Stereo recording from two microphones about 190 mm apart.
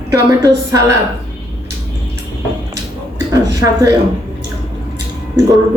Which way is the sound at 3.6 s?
15° right (ahead or behind).